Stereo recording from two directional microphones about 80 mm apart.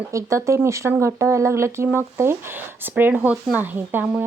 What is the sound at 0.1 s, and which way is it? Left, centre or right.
Speech, right.